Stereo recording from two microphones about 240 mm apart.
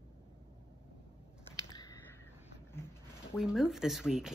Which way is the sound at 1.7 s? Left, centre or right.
Centre.